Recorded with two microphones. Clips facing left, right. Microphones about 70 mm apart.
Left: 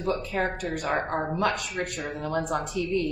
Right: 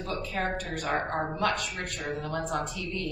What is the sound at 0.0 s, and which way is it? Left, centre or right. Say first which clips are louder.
Speech: left 4 dB; left.